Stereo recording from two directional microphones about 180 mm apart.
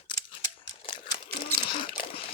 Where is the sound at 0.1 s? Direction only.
30° left (ahead or behind).